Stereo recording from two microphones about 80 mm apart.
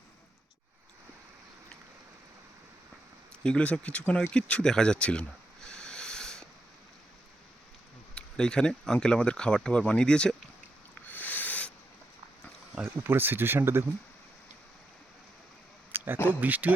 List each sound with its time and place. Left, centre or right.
3.4 s speech: centre
4.3 s a sound: centre
8.1 s speech: centre
11.0 s owl: left
13.0 s speech: right
15.9 s a sound: right
16.2 s speech: right